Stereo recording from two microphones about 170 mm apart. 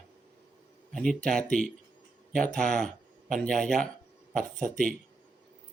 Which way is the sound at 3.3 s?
55° right (ahead or behind).